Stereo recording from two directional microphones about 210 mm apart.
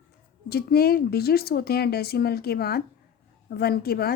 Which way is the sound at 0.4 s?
45° left (ahead or behind).